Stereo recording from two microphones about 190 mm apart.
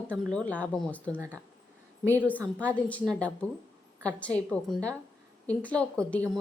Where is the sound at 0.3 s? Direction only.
5° left (ahead or behind).